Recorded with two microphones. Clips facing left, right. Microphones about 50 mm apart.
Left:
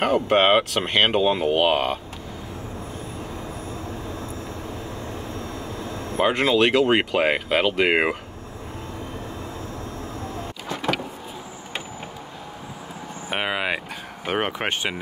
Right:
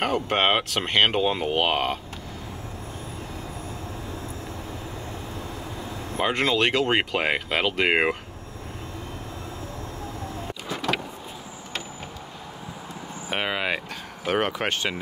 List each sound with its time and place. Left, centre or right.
0.0 s speech: centre
6.1 s speech: centre
13.3 s vehicle: centre
14.2 s speech: centre